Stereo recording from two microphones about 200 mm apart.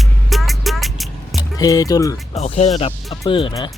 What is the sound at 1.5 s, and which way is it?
Speech, 15° left (ahead or behind).